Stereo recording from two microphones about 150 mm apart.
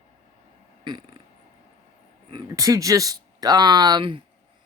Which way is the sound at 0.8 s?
30° right (ahead or behind).